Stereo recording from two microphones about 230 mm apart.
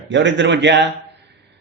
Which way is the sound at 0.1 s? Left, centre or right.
Right.